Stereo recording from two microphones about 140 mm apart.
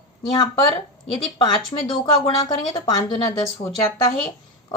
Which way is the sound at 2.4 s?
25° left (ahead or behind).